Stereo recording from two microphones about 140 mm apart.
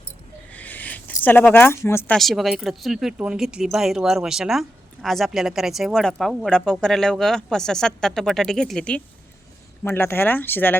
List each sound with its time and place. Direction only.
0.5 s a sound: 10° left (ahead or behind)
2.1 s a woman's voice: centre (ahead or behind)
9.8 s speech: 15° left (ahead or behind)